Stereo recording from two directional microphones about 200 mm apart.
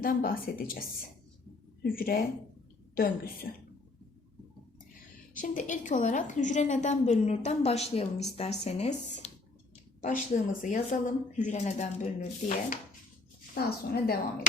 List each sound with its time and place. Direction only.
0.0 s a woman's voice: 45° left (ahead or behind)
1.8 s a woman's voice: 45° left (ahead or behind)
5.3 s speech: 40° left (ahead or behind)
13.5 s a woman's voice: 50° left (ahead or behind)